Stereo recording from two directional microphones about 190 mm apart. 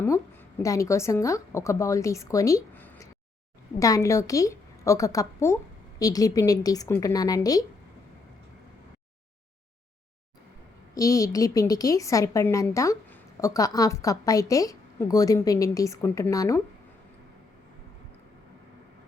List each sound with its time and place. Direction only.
0.6 s a woman's voice: 15° left (ahead or behind)
10.9 s a woman's voice: 20° left (ahead or behind)